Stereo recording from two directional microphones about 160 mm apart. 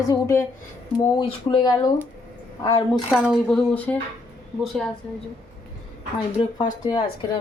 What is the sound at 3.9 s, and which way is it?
Speech, 10° left (ahead or behind).